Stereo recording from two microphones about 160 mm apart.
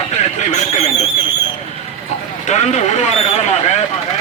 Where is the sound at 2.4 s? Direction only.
45° left (ahead or behind).